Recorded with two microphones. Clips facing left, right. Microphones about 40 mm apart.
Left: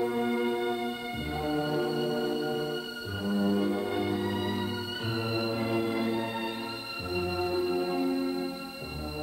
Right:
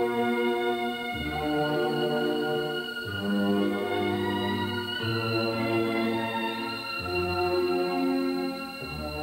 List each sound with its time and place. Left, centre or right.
0.0 s music: right
1.4 s organ: right
3.3 s music: right
5.1 s organ: right